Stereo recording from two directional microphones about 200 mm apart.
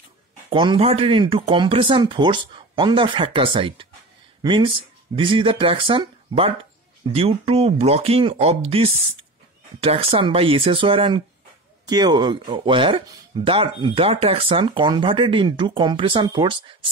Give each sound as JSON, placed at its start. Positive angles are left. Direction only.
{"t": 0.5, "sound": "speech", "side_deg": -25}